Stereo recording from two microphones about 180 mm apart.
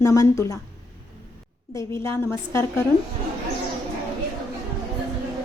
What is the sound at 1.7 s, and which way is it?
Speech, 15° left (ahead or behind).